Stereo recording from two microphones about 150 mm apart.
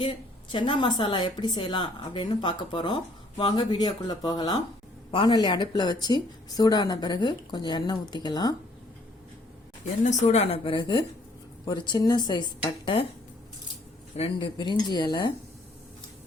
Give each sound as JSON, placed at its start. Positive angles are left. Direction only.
{"t": 0.0, "sound": "a woman's voice", "side_deg": 35}
{"t": 10.0, "sound": "a woman's voice", "side_deg": 55}
{"t": 14.2, "sound": "a woman's voice", "side_deg": 35}